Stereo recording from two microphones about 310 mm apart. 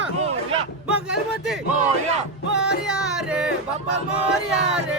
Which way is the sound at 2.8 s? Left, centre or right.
Centre.